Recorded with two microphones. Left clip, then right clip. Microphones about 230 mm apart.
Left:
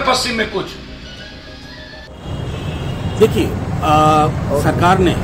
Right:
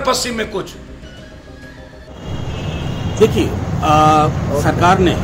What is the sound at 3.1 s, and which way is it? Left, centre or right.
Speech, centre.